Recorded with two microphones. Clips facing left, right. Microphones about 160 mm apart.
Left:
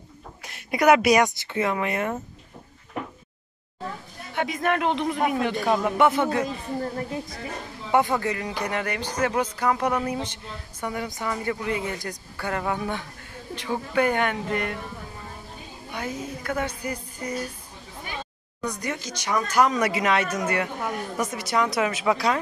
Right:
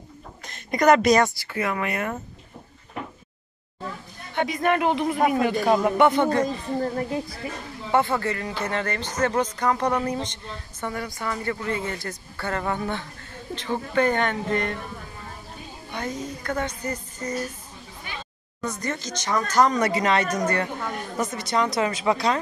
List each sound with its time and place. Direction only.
0.5 s speech: 5° left (ahead or behind)
4.3 s speech: centre (ahead or behind)
7.9 s speech: 15° left (ahead or behind)
15.9 s speech: 10° left (ahead or behind)
18.6 s speech: 15° left (ahead or behind)